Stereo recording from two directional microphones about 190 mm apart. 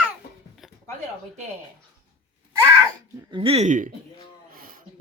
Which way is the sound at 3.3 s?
30° right (ahead or behind).